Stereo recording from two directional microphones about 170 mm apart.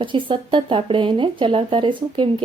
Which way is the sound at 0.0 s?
30° right (ahead or behind).